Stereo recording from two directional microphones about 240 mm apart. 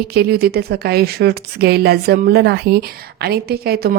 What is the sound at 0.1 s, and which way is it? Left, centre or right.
A woman's voice, right.